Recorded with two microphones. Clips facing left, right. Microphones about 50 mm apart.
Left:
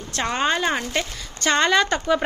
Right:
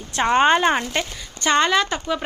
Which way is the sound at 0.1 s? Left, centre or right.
Right.